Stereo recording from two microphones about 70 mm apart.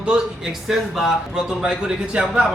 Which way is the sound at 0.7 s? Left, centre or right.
Centre.